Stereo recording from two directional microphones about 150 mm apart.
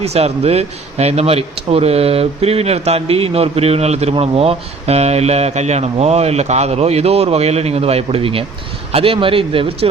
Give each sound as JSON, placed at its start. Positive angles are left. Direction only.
{"t": 0.0, "sound": "a man's voice", "side_deg": -45}